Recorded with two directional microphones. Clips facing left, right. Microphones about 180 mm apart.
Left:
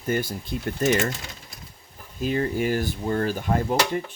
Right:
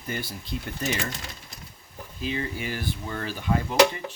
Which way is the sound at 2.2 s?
45° left (ahead or behind).